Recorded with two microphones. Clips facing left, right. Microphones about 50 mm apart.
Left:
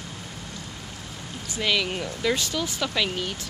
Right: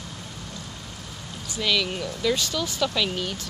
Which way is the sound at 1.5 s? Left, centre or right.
Left.